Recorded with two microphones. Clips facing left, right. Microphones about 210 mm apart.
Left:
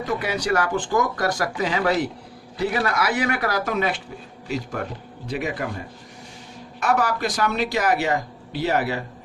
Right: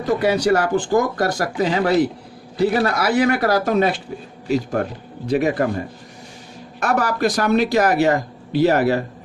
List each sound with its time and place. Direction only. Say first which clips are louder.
0.1 s speech: right 8 dB; 30° right (ahead or behind)
5.3 s speech: right 9 dB; 45° right (ahead or behind)
6.7 s speech: right 2 dB; 40° right (ahead or behind)